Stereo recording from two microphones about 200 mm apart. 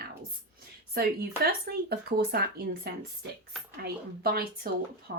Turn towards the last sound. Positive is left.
turn(degrees=-60)  # may be behind; listen again after turning